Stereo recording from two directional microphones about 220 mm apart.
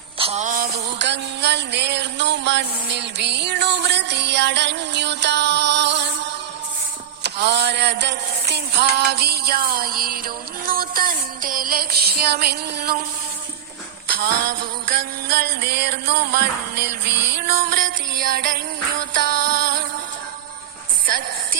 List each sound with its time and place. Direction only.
0.2 s music: 30° right (ahead or behind); by 6.1 s 50° right (ahead or behind)
7.2 s music: 50° right (ahead or behind)
14.1 s music: 40° right (ahead or behind)